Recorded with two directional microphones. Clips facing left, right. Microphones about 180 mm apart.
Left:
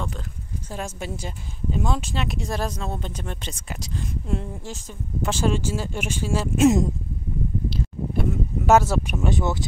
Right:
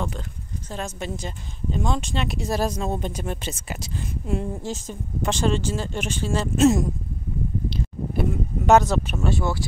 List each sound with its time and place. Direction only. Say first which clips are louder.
0.7 s speech: right 1 dB; 10° left (ahead or behind)
5.2 s speech: right 1 dB; 5° left (ahead or behind)
7.7 s a sound: even; 5° left (ahead or behind); by 9.7 s 20° left (ahead or behind)